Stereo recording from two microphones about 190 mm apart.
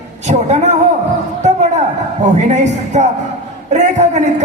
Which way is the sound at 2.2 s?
40° right (ahead or behind).